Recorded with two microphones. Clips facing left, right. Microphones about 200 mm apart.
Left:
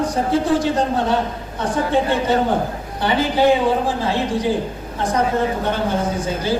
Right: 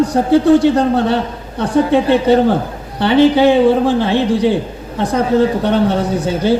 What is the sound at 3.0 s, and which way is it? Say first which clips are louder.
A woman's voice: right 8 dB; 70° right (ahead or behind).